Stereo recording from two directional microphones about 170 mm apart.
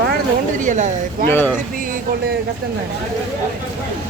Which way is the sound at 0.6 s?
45° right (ahead or behind).